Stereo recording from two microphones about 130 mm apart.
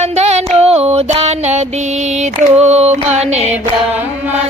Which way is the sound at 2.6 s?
55° right (ahead or behind).